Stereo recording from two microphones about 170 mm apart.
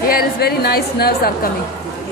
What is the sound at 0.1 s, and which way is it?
A woman's voice, 60° left (ahead or behind).